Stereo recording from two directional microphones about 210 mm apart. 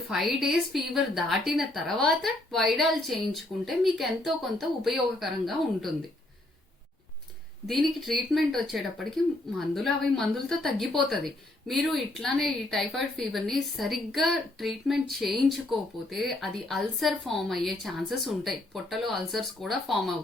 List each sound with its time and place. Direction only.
0.1 s a woman's voice: centre (ahead or behind)
7.7 s a woman's voice: centre (ahead or behind)